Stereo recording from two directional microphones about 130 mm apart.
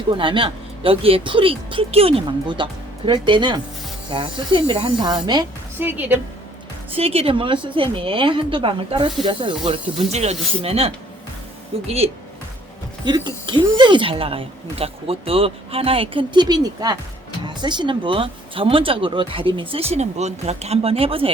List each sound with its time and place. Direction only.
0.1 s speech: 40° right (ahead or behind)
5.8 s a woman's voice: 15° right (ahead or behind)
6.9 s speech: 50° right (ahead or behind)
10.1 s speech: 55° right (ahead or behind)
13.1 s speech: 35° right (ahead or behind)